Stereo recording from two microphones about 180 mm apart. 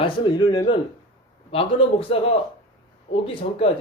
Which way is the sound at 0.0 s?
25° left (ahead or behind).